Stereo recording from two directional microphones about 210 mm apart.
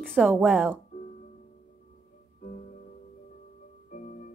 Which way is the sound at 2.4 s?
40° left (ahead or behind).